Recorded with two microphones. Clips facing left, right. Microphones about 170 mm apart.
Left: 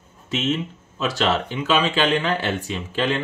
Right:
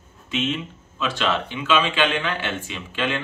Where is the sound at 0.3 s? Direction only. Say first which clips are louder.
Left 2 dB; 40° left (ahead or behind).